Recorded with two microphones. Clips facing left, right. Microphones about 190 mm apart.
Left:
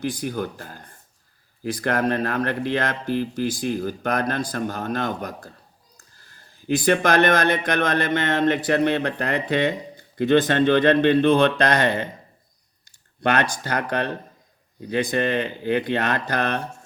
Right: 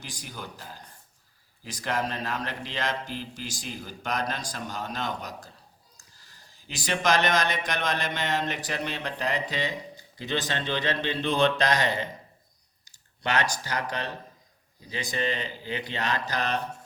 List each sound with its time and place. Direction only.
0.0 s speech: 55° left (ahead or behind)